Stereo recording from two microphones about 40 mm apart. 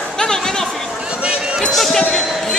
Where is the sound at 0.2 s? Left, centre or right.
Centre.